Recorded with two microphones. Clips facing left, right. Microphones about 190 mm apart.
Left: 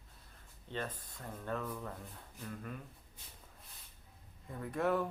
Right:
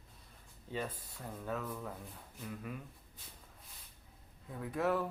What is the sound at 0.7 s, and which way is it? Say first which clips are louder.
Speech: right 1 dB; 10° right (ahead or behind).